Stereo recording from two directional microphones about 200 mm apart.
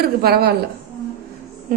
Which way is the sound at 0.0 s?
50° right (ahead or behind).